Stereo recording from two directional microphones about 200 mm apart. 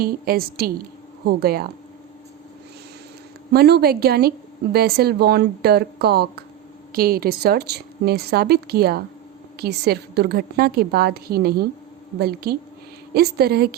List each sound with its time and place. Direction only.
0.0 s a woman's voice: 50° right (ahead or behind)
3.5 s a woman's voice: 55° right (ahead or behind)